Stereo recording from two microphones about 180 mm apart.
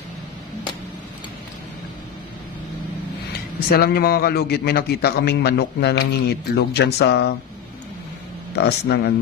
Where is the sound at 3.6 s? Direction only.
60° left (ahead or behind).